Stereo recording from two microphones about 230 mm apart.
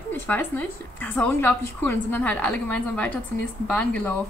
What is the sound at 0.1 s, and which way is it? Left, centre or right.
A woman's voice, centre.